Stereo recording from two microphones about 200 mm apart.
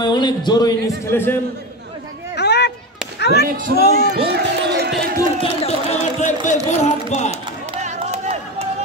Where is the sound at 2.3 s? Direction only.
55° left (ahead or behind).